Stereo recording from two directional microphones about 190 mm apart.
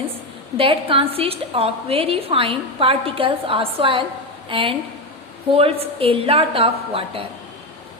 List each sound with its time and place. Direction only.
0.5 s a woman's voice: 30° right (ahead or behind)